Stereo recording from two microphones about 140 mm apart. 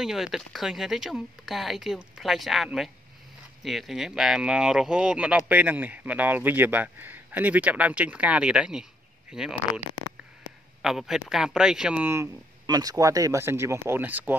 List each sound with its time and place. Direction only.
0.0 s speech: 5° right (ahead or behind)
10.8 s speech: 5° right (ahead or behind)
12.6 s speech: 30° right (ahead or behind)